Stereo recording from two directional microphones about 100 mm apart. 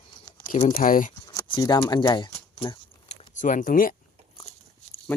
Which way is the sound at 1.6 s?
45° left (ahead or behind).